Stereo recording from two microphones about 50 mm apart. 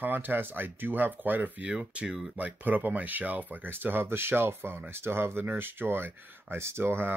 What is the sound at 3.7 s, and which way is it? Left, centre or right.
Speech, right.